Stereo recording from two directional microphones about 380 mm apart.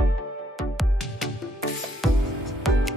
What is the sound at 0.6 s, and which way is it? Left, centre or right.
Music, centre.